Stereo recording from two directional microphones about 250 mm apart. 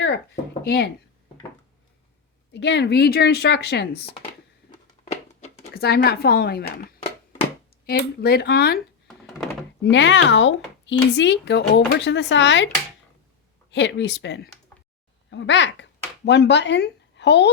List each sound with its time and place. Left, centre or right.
0.6 s speech: left
2.5 s a woman's voice: left
5.4 s a woman's voice: left
9.0 s door: centre
9.9 s speech: left